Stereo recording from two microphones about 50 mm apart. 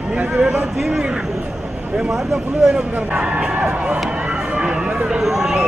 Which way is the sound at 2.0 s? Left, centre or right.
Centre.